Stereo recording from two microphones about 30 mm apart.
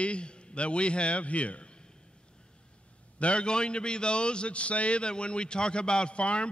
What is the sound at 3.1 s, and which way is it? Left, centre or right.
Speech, left.